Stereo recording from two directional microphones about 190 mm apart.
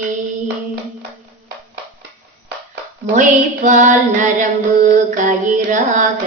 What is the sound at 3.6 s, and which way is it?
Female singing, 40° right (ahead or behind).